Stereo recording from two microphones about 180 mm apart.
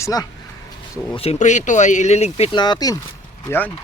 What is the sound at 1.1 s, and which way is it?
Speech, 35° left (ahead or behind).